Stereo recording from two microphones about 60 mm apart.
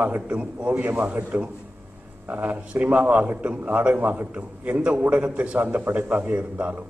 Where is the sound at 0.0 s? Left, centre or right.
Right.